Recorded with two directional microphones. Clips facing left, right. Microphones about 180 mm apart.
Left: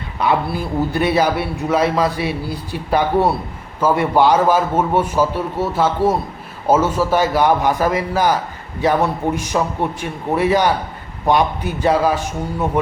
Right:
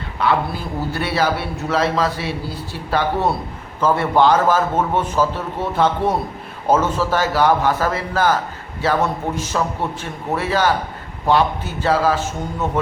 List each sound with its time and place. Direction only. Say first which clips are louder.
0.2 s a man's voice: left 1 dB; 15° left (ahead or behind)